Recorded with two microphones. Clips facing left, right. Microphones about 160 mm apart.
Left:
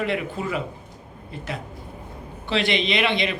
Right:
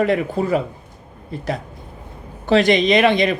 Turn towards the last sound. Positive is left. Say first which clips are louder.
# right 8 dB
turn(degrees=-45)  # may be behind; listen again after turning